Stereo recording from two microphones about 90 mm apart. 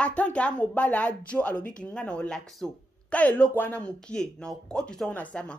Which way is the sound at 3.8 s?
10° left (ahead or behind).